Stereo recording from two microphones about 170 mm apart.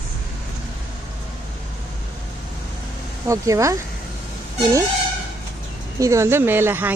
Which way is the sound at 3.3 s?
20° right (ahead or behind).